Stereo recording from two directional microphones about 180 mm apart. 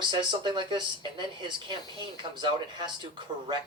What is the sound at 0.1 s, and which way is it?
Speech, 25° right (ahead or behind).